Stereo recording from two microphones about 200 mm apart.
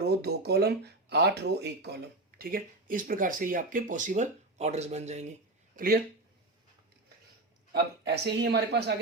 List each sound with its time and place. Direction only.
0.0 s speech: 55° right (ahead or behind); by 5.3 s 35° right (ahead or behind)
5.7 s speech: 45° right (ahead or behind)
7.7 s speech: 55° right (ahead or behind)